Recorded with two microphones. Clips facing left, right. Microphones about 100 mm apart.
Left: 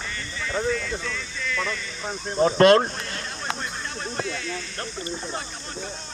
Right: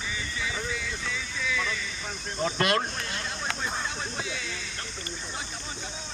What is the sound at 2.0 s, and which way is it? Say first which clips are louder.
Speech: left 9 dB; 35° left (ahead or behind).